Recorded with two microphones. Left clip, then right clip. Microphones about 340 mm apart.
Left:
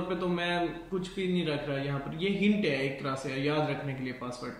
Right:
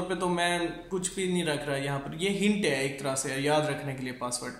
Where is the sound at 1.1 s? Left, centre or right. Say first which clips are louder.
Right 2 dB; centre.